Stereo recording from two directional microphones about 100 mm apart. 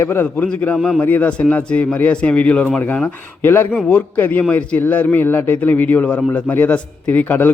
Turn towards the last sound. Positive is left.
turn(degrees=15)  # may be behind; listen again after turning